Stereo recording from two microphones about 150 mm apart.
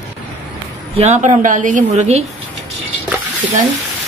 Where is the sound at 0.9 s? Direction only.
50° right (ahead or behind).